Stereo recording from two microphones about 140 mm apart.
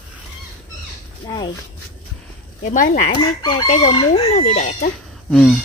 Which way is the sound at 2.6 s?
60° left (ahead or behind).